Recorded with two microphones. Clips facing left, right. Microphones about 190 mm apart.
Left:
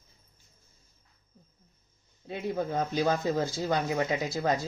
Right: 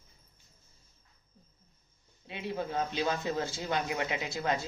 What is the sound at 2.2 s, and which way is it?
Speech, 40° left (ahead or behind).